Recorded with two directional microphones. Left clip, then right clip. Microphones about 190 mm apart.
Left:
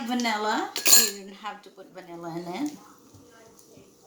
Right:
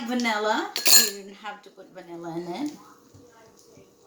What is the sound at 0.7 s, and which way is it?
Cutlery, 15° right (ahead or behind).